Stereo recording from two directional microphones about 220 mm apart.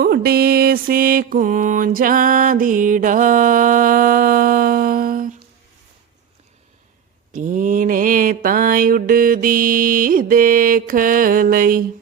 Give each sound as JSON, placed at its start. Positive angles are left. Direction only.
{"t": 0.0, "sound": "mantra", "side_deg": -45}
{"t": 7.3, "sound": "mantra", "side_deg": -35}